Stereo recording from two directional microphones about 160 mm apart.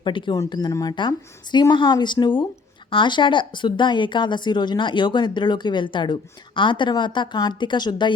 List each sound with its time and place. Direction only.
0.0 s a woman's voice: 30° left (ahead or behind)